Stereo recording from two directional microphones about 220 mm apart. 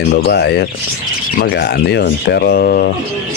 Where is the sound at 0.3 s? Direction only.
50° left (ahead or behind).